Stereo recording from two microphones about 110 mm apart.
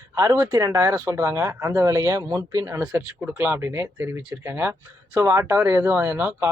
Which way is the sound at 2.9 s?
15° right (ahead or behind).